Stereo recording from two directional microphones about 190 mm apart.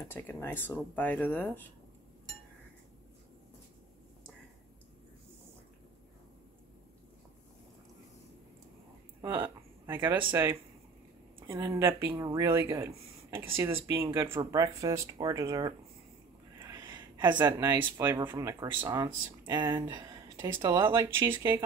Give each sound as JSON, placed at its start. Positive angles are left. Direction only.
{"t": 0.1, "sound": "speech", "side_deg": 10}
{"t": 9.2, "sound": "a sound", "side_deg": -10}
{"t": 10.3, "sound": "speech", "side_deg": -15}